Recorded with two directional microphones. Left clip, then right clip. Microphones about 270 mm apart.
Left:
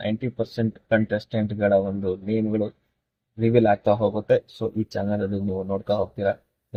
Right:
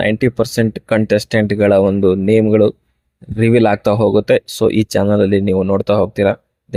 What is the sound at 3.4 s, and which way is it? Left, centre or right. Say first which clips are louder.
Speech: right 7 dB; right.